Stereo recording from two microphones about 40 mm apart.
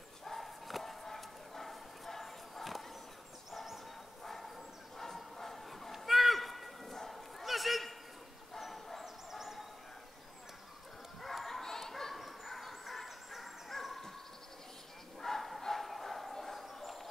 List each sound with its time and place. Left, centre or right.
0.2 s bow-wow: centre
3.5 s a sound: centre
4.2 s a sound: centre
7.1 s dog: centre
8.5 s bow-wow: centre
9.0 s fowl: centre
11.1 s bow-wow: centre
12.2 s fowl: centre
15.1 s bow-wow: centre
16.6 s a sound: centre